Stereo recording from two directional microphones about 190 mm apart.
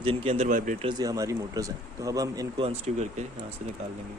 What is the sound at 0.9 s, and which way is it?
Speech, 20° right (ahead or behind).